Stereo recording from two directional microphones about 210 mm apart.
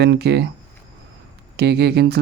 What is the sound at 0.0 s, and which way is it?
Speech, 50° right (ahead or behind).